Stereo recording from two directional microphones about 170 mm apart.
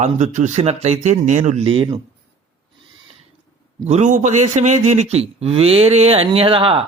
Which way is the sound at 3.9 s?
45° right (ahead or behind).